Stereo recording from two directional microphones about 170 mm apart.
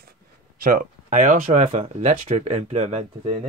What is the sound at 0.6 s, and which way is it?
Speech, 50° right (ahead or behind).